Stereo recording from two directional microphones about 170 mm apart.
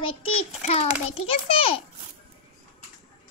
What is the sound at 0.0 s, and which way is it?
A child's voice, 35° left (ahead or behind).